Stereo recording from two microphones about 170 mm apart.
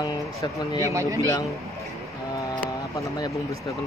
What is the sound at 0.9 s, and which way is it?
Speech, 20° right (ahead or behind).